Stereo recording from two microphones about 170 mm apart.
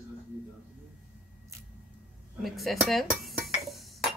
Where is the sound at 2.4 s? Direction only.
Centre (ahead or behind).